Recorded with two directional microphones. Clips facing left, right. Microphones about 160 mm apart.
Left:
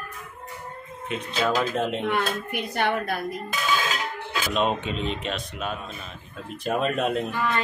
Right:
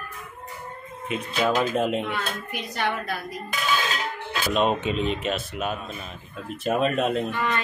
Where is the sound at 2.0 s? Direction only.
55° left (ahead or behind).